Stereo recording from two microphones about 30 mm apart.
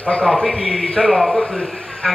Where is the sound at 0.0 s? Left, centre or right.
Left.